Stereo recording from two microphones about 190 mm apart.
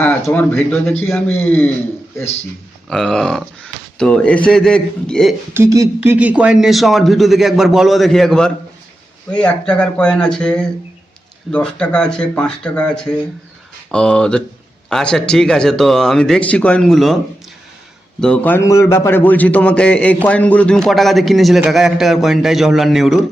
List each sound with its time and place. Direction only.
0.3 s a man's voice: 10° left (ahead or behind)
2.9 s a man's voice: centre (ahead or behind)
5.5 s a man's voice: 15° right (ahead or behind); by 17.2 s centre (ahead or behind)
18.2 s a man's voice: 5° left (ahead or behind)